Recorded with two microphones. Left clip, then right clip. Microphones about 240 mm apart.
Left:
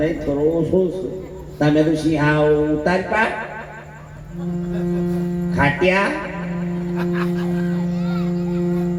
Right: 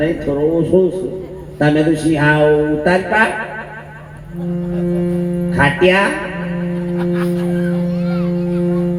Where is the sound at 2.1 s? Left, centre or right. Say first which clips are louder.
Right 5 dB; right.